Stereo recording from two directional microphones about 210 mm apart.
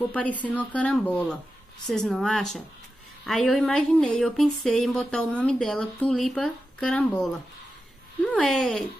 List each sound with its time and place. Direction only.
0.0 s speech: 5° left (ahead or behind)